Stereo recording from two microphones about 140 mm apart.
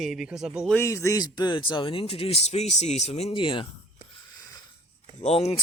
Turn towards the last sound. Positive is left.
turn(degrees=45)  # may be behind; listen again after turning